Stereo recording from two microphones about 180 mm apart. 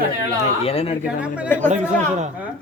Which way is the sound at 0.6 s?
30° left (ahead or behind).